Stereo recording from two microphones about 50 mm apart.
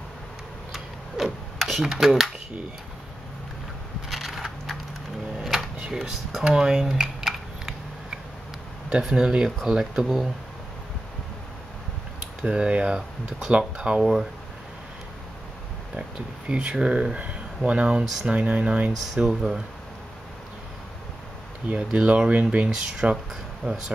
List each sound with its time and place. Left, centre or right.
0.7 s a sound: centre
4.1 s crushing: centre
5.4 s a sound: centre
8.9 s speech: centre
12.4 s speech: right
16.0 s speech: centre
21.6 s speech: right
23.6 s speech: right